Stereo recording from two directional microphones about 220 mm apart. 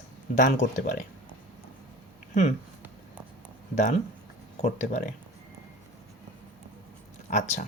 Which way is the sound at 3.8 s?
30° left (ahead or behind).